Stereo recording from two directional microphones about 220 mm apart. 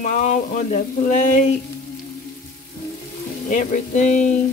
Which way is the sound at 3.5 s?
35° left (ahead or behind).